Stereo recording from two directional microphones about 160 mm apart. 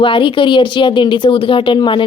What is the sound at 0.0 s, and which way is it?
A woman's voice, 30° left (ahead or behind).